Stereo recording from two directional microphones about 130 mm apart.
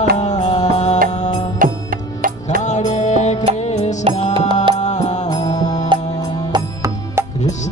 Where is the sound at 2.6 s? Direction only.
70° left (ahead or behind).